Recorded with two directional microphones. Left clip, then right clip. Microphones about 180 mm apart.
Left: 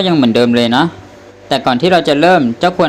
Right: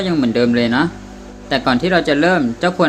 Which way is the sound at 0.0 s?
25° left (ahead or behind).